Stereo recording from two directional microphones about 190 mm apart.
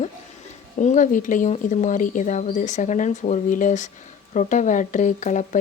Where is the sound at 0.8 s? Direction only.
40° left (ahead or behind).